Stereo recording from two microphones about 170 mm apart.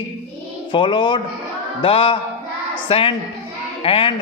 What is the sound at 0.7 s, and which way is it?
A man's voice, 30° left (ahead or behind).